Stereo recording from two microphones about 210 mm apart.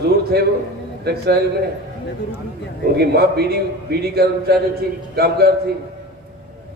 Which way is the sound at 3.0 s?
50° right (ahead or behind).